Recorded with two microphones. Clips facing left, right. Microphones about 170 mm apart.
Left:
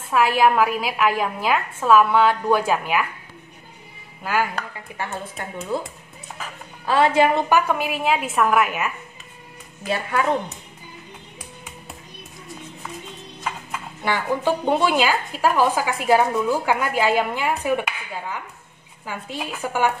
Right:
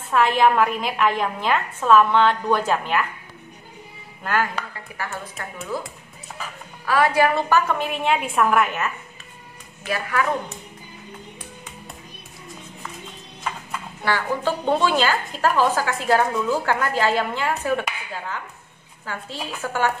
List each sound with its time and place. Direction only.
0.1 s a woman's voice: 5° left (ahead or behind)
4.2 s speech: 10° left (ahead or behind)
4.9 s a woman's voice: 20° left (ahead or behind)
6.9 s a woman's voice: 25° left (ahead or behind); by 8.9 s 10° left (ahead or behind)
9.8 s a woman's voice: 25° left (ahead or behind)
13.4 s clip-clop: 5° left (ahead or behind)
14.0 s a woman's voice: 15° left (ahead or behind)